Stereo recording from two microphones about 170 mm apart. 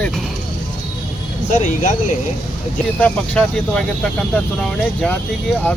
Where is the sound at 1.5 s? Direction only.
45° left (ahead or behind).